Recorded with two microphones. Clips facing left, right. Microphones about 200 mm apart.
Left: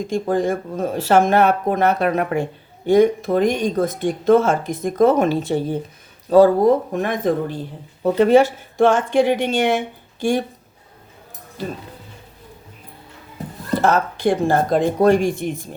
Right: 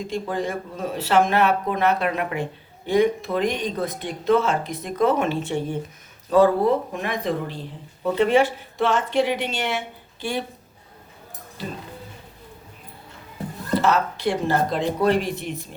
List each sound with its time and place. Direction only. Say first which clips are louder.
0.1 s speech: left 8 dB; 45° left (ahead or behind)
13.8 s speech: left 5 dB; 50° left (ahead or behind)